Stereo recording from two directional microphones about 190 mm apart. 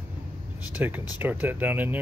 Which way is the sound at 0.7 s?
10° right (ahead or behind).